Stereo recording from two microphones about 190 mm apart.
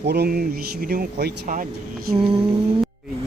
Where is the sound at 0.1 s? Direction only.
55° right (ahead or behind).